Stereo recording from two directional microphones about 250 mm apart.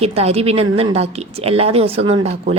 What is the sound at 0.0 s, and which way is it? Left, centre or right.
A woman's voice, right.